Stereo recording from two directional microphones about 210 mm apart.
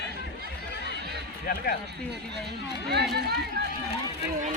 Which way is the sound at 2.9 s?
50° right (ahead or behind).